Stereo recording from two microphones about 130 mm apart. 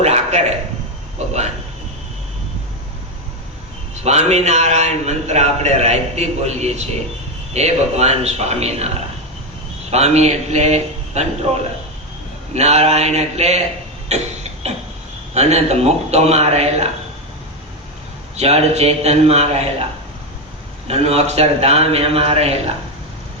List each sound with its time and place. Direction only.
0.0 s a sound: 55° right (ahead or behind)
1.2 s a man's voice: 60° right (ahead or behind)
3.9 s a man's voice: 55° right (ahead or behind)
9.9 s a man's voice: 55° right (ahead or behind)
15.4 s a man's voice: 55° right (ahead or behind)
18.3 s a man's voice: 55° right (ahead or behind)
20.8 s a man's voice: 50° right (ahead or behind)